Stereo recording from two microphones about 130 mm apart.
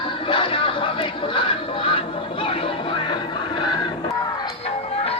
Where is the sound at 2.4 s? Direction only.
45° left (ahead or behind).